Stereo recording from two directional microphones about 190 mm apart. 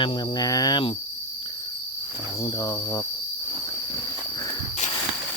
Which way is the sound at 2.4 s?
20° left (ahead or behind).